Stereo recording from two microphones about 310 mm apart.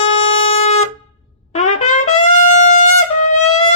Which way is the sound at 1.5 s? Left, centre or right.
Left.